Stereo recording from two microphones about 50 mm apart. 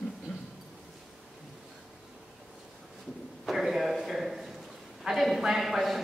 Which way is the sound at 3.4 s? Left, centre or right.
Centre.